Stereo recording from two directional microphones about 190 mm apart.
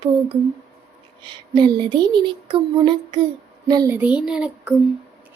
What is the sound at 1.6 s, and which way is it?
Child singing, 25° right (ahead or behind).